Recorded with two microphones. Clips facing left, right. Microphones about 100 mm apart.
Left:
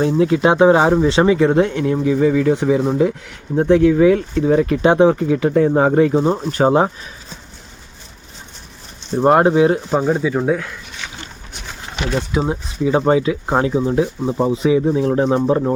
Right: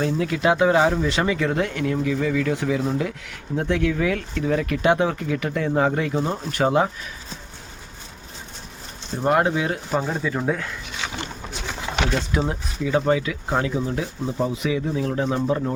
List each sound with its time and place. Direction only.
0.0 s speech: 25° left (ahead or behind)
9.2 s speech: 35° left (ahead or behind)
10.3 s speech: 10° left (ahead or behind)
12.5 s speech: 30° left (ahead or behind)